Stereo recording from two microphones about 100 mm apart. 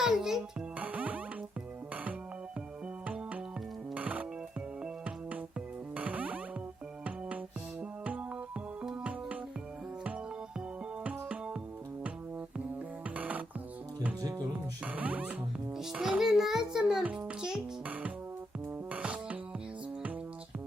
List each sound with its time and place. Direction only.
0.0 s a child's voice: 5° right (ahead or behind)
0.8 s music: 15° right (ahead or behind)
3.9 s music: 15° right (ahead or behind)
7.8 s music: 15° right (ahead or behind)
11.0 s music: 15° right (ahead or behind)
13.1 s music: 15° right (ahead or behind)
14.8 s music: 15° right (ahead or behind)